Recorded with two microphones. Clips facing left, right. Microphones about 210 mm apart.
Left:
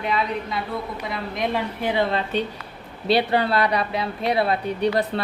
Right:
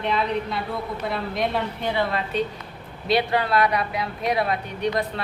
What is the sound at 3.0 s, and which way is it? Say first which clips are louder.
Speech: left 2 dB; 30° left (ahead or behind).